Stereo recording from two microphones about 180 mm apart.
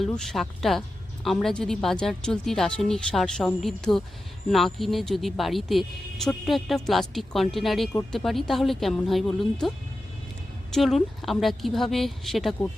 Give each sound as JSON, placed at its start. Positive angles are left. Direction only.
{"t": 0.0, "sound": "speech", "side_deg": 0}